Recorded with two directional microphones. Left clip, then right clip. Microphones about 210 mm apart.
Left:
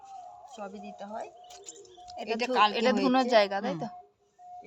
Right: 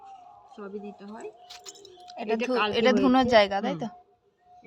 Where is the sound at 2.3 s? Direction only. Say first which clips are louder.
Left 2 dB; 55° left (ahead or behind).